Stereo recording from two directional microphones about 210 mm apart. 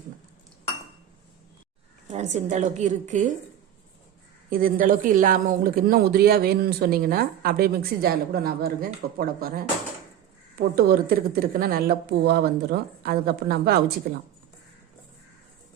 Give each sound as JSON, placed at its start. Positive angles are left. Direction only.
{"t": 2.0, "sound": "a woman's voice", "side_deg": -35}
{"t": 4.4, "sound": "speech", "side_deg": -40}
{"t": 10.8, "sound": "speech", "side_deg": -45}